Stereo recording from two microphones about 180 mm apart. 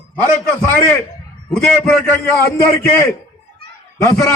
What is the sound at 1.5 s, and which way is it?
Speech, 5° left (ahead or behind).